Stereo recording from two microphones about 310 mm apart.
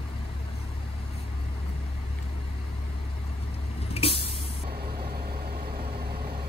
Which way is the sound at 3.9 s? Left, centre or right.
Centre.